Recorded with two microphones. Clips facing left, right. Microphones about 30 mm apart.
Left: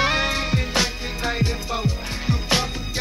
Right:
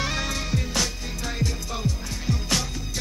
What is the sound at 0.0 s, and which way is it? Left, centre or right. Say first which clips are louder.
Music: left 7 dB; left.